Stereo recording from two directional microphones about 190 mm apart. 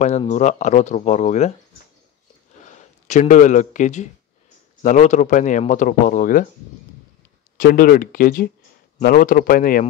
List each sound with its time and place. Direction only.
0.0 s speech: 35° left (ahead or behind)
2.6 s speech: 40° left (ahead or behind)
7.5 s speech: 45° left (ahead or behind)